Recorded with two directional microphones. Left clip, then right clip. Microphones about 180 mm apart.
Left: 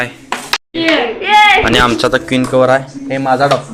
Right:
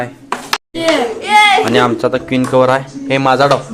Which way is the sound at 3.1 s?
25° right (ahead or behind).